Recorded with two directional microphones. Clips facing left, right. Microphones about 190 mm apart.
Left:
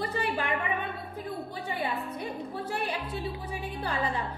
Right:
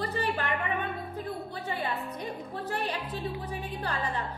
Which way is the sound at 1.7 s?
10° left (ahead or behind).